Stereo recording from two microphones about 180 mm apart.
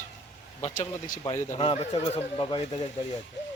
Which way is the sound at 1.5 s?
35° left (ahead or behind).